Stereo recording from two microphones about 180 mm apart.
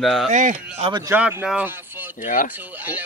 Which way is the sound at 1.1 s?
5° right (ahead or behind).